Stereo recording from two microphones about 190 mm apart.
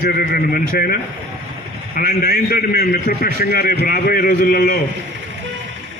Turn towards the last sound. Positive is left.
turn(degrees=50)  # may be behind; listen again after turning